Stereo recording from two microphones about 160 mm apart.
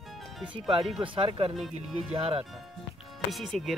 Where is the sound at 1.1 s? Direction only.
35° right (ahead or behind).